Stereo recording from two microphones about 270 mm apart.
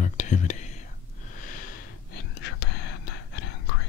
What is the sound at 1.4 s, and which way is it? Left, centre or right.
Sniff, left.